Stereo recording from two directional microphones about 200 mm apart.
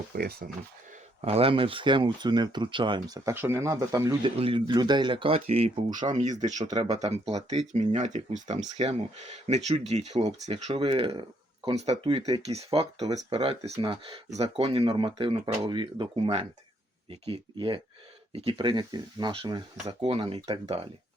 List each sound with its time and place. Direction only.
0.1 s speech: 50° right (ahead or behind)
1.2 s speech: 30° right (ahead or behind)
4.4 s speech: 25° right (ahead or behind)
6.4 s speech: 35° right (ahead or behind)